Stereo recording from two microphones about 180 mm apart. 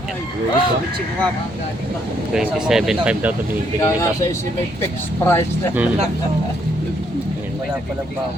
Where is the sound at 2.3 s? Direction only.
5° right (ahead or behind).